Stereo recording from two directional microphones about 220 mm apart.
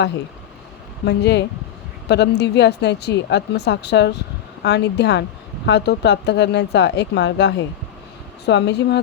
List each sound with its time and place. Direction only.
1.0 s a woman's voice: 50° left (ahead or behind)